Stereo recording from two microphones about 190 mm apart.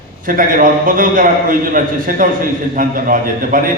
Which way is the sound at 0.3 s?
45° right (ahead or behind).